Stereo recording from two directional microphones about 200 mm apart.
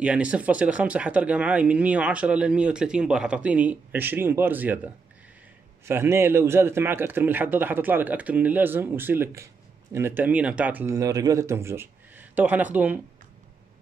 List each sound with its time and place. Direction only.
0.0 s speech: 5° right (ahead or behind)